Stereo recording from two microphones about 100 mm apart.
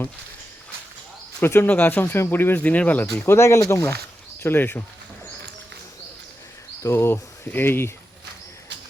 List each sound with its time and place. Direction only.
1.4 s speech: 20° left (ahead or behind)
3.2 s speech: 25° left (ahead or behind)
6.8 s speech: 25° left (ahead or behind)